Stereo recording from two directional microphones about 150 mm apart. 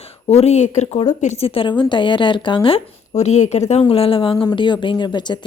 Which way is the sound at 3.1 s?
50° left (ahead or behind).